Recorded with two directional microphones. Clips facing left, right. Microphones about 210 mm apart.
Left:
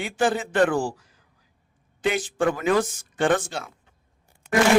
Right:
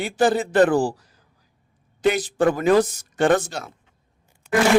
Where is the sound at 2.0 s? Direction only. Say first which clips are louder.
Right 4 dB; 40° right (ahead or behind).